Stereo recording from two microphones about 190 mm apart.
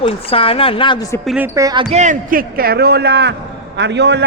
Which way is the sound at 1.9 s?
40° right (ahead or behind).